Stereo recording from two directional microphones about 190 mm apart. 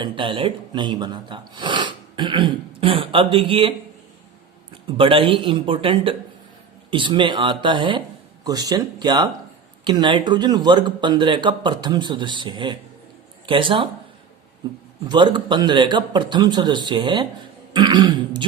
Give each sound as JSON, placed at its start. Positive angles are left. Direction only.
{"t": 0.0, "sound": "speech", "side_deg": -25}
{"t": 4.9, "sound": "speech", "side_deg": -25}